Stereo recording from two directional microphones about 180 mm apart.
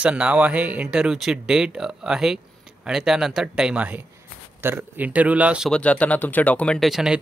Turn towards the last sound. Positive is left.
turn(degrees=0)  # may be behind; listen again after turning